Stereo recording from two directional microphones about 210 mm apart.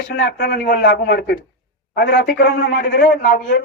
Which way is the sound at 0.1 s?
55° left (ahead or behind).